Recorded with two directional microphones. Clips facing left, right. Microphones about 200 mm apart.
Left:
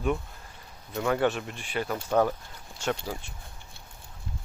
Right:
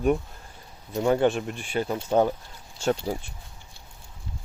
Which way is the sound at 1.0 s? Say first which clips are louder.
Right 4 dB; 30° right (ahead or behind).